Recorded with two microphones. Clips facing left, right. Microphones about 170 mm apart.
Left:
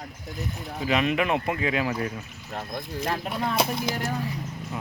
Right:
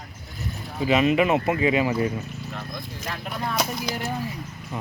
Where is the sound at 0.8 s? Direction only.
Centre (ahead or behind).